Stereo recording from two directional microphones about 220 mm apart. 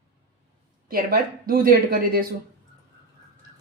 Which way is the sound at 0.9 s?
40° right (ahead or behind).